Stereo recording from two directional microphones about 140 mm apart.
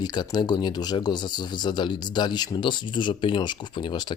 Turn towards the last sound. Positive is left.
turn(degrees=35)  # may be behind; listen again after turning